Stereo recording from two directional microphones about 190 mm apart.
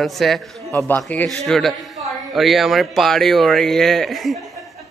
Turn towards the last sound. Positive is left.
turn(degrees=0)  # may be behind; listen again after turning